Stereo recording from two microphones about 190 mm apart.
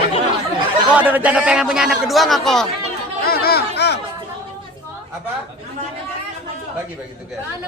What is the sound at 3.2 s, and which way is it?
Chatter, 55° left (ahead or behind).